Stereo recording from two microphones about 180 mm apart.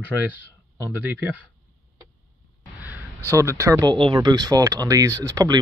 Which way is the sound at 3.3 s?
15° right (ahead or behind).